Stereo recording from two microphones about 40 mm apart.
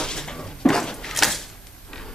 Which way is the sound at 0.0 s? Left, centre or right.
Centre.